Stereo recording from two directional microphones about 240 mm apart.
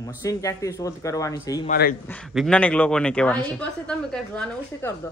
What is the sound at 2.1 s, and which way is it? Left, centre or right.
A woman's voice, centre.